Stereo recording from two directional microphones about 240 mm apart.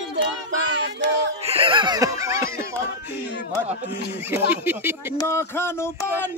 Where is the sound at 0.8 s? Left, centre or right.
Right.